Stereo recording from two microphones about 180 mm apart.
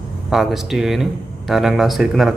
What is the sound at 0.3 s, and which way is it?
Speech, centre (ahead or behind).